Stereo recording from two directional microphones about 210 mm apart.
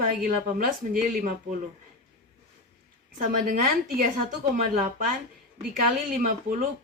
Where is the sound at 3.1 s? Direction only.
40° right (ahead or behind).